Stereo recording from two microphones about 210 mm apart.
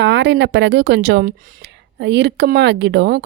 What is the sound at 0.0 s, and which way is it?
Speech, 55° right (ahead or behind).